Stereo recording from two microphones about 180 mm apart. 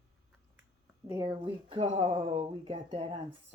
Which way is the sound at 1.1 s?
25° right (ahead or behind).